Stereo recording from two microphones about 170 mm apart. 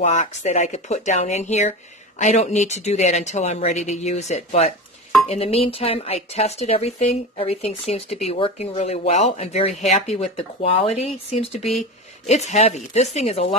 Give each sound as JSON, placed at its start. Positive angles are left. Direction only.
{"t": 0.0, "sound": "a woman's voice", "side_deg": 45}
{"t": 12.3, "sound": "a woman's voice", "side_deg": 40}